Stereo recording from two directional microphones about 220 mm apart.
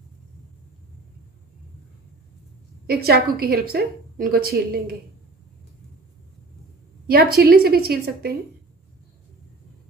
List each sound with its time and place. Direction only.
2.9 s a woman's voice: 45° right (ahead or behind)
7.1 s a woman's voice: 45° right (ahead or behind)